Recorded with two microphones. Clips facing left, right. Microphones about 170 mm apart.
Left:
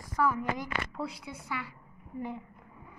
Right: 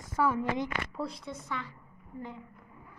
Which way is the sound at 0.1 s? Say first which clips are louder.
Right 1 dB; 25° right (ahead or behind).